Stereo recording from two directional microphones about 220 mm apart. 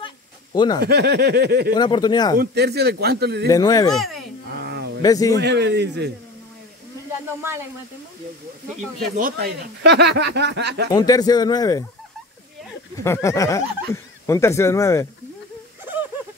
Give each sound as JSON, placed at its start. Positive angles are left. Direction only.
{"t": 0.0, "sound": "a sound", "side_deg": 20}
{"t": 0.8, "sound": "speech", "side_deg": -50}
{"t": 1.7, "sound": "speech", "side_deg": 20}
{"t": 2.3, "sound": "speech", "side_deg": -45}
{"t": 3.4, "sound": "speech", "side_deg": 15}
{"t": 3.9, "sound": "speech", "side_deg": 0}
{"t": 4.6, "sound": "a sound", "side_deg": -50}
{"t": 5.0, "sound": "speech", "side_deg": 15}
{"t": 5.4, "sound": "speech", "side_deg": -50}
{"t": 9.0, "sound": "speech", "side_deg": -45}
{"t": 10.9, "sound": "speech", "side_deg": 15}
{"t": 13.0, "sound": "speech", "side_deg": 10}
{"t": 15.8, "sound": "a sound", "side_deg": -10}